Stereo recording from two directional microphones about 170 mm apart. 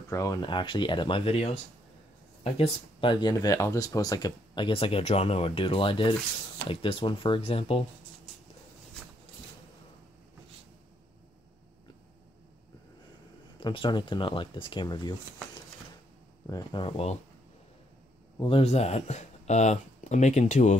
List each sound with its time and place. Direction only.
0.1 s speech: 20° left (ahead or behind)
13.6 s speech: 30° left (ahead or behind)
16.4 s speech: 25° left (ahead or behind)
18.4 s speech: 35° left (ahead or behind)